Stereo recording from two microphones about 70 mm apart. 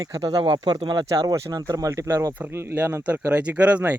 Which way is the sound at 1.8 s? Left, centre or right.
Right.